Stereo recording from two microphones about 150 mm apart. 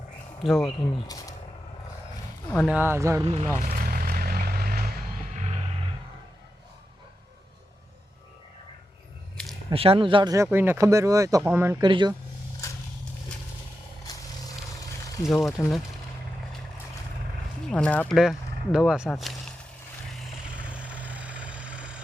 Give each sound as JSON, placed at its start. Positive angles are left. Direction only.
{"t": 0.4, "sound": "speech", "side_deg": 0}
{"t": 0.7, "sound": "speech", "side_deg": 25}
{"t": 2.6, "sound": "speech", "side_deg": -10}
{"t": 3.2, "sound": "speech", "side_deg": -45}
{"t": 3.7, "sound": "vehicle", "side_deg": -85}
{"t": 9.6, "sound": "speech", "side_deg": -40}
{"t": 10.3, "sound": "speech", "side_deg": -15}
{"t": 11.8, "sound": "speech", "side_deg": -30}
{"t": 15.6, "sound": "speech", "side_deg": 15}
{"t": 17.7, "sound": "speech", "side_deg": 10}
{"t": 18.2, "sound": "speech", "side_deg": -5}
{"t": 19.1, "sound": "a sound", "side_deg": 0}
{"t": 20.1, "sound": "vehicle", "side_deg": -5}